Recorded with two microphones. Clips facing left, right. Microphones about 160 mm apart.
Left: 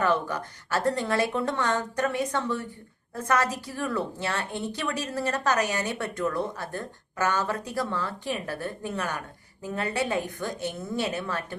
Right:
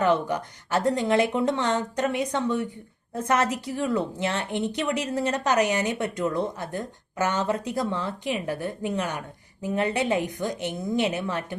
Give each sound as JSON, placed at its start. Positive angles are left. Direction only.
{"t": 0.0, "sound": "a woman's voice", "side_deg": -20}